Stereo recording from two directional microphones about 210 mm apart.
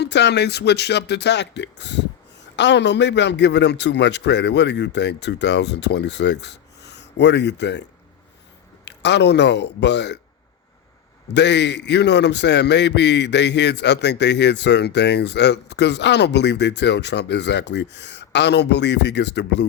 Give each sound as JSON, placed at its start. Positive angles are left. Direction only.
{"t": 0.0, "sound": "a man's voice", "side_deg": 55}
{"t": 11.3, "sound": "a man's voice", "side_deg": 55}